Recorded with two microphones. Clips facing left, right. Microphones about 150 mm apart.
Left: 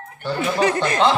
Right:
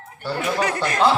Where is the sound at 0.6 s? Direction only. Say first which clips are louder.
Left 6 dB; 25° left (ahead or behind).